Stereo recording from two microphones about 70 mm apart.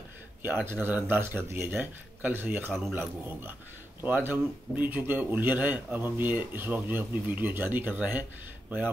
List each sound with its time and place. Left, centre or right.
0.7 s speech: right